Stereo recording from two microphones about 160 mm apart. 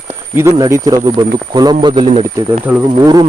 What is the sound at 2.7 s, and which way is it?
Speech, 10° right (ahead or behind).